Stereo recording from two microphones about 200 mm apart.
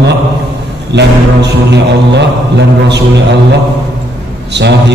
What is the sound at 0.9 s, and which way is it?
Mantra, 60° right (ahead or behind).